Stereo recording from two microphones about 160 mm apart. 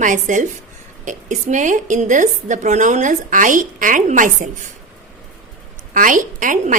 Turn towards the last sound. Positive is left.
turn(degrees=-55)  # may be behind; listen again after turning